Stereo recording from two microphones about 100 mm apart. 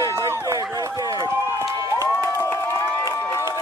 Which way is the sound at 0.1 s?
30° right (ahead or behind).